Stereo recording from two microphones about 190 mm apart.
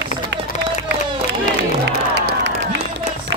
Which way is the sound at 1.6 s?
60° right (ahead or behind).